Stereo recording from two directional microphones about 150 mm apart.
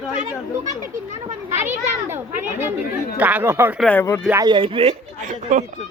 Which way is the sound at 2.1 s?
15° right (ahead or behind).